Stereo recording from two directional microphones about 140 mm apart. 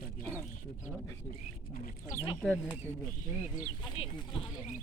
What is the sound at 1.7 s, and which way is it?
Speech, 75° left (ahead or behind).